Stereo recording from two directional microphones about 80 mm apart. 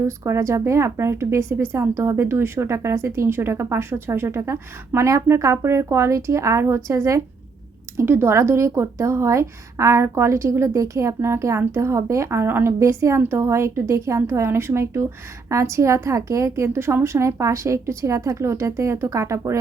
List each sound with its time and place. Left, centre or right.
0.0 s a woman's voice: right